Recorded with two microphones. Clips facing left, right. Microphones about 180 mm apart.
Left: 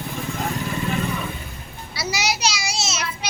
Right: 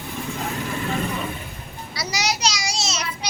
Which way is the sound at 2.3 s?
5° left (ahead or behind).